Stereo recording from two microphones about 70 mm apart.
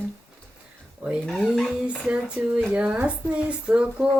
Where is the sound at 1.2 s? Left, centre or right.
Centre.